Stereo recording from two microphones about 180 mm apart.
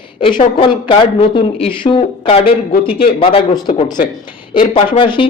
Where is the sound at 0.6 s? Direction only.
30° left (ahead or behind).